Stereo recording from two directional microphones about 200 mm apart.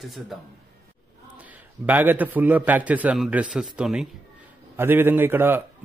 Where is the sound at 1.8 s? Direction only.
10° right (ahead or behind).